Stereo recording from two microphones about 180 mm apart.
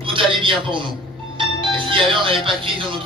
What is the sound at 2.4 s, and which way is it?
Speech, 30° right (ahead or behind).